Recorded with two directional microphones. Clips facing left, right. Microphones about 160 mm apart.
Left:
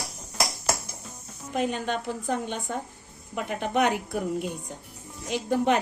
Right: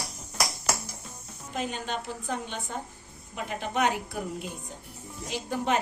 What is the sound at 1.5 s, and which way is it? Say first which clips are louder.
A woman's voice: left 5 dB; 55° left (ahead or behind).